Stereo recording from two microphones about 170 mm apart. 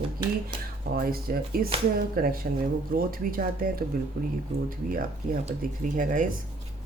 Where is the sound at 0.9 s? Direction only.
60° right (ahead or behind).